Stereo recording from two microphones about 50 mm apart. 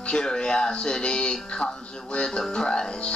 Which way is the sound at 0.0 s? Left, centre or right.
Centre.